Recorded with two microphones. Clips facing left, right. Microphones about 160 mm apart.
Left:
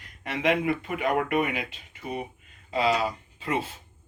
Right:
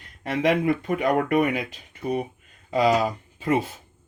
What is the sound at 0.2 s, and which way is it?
Speech, 40° right (ahead or behind).